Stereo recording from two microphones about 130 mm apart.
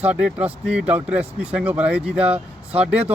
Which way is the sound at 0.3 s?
10° right (ahead or behind).